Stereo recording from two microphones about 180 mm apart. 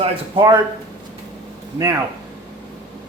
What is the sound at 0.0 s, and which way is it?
Speech, 25° right (ahead or behind).